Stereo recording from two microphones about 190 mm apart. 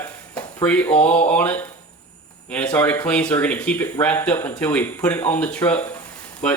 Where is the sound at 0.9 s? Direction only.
35° left (ahead or behind).